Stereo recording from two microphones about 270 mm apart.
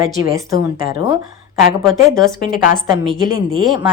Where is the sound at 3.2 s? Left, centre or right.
Centre.